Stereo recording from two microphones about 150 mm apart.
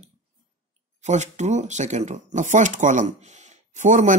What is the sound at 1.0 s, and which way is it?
Speech, 50° right (ahead or behind).